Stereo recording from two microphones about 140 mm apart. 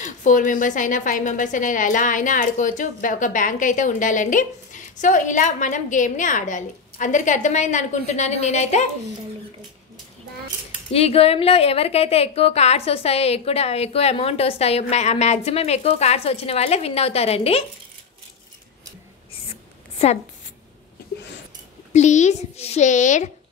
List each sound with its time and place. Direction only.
0.0 s a woman's voice: 65° left (ahead or behind)
10.9 s a woman's voice: 45° left (ahead or behind)
19.5 s a sound: 50° left (ahead or behind)
21.9 s a woman's voice: 55° left (ahead or behind)